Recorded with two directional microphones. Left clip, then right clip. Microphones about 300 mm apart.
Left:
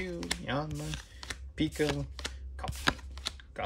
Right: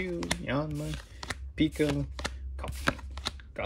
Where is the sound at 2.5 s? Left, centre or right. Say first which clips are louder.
Left 1 dB; centre.